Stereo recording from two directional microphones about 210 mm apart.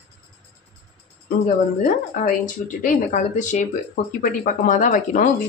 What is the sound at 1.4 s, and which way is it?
Speech, 35° left (ahead or behind).